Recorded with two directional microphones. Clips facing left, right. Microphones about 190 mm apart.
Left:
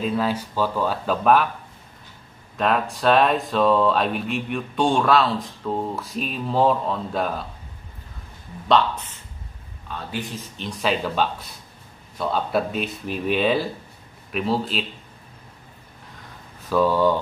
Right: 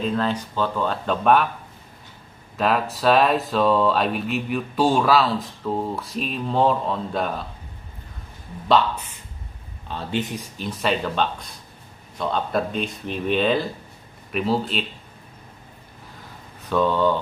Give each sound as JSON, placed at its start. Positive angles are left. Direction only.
{"t": 0.0, "sound": "speech", "side_deg": 10}
{"t": 2.5, "sound": "speech", "side_deg": 0}
{"t": 8.6, "sound": "speech", "side_deg": 0}
{"t": 9.8, "sound": "speech", "side_deg": -30}
{"t": 10.6, "sound": "speech", "side_deg": 0}
{"t": 16.6, "sound": "speech", "side_deg": 5}